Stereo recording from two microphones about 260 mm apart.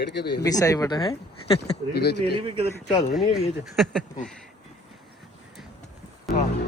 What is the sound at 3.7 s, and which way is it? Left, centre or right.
Speech, centre.